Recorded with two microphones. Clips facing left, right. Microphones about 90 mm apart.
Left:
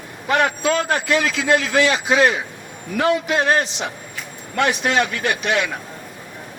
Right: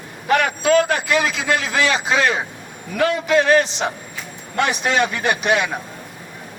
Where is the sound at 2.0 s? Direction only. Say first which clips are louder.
Left 2 dB; 25° left (ahead or behind).